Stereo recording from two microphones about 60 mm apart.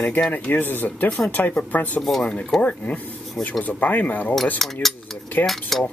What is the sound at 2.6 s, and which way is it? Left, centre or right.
Speech, left.